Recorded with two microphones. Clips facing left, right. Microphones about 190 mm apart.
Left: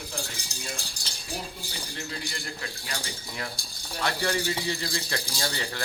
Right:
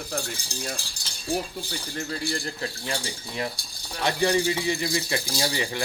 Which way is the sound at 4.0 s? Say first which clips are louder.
Right 5 dB; 20° right (ahead or behind).